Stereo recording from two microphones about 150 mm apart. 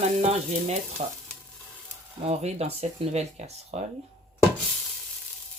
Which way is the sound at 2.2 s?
45° right (ahead or behind).